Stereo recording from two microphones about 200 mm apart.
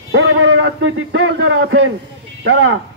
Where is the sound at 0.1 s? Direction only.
75° right (ahead or behind).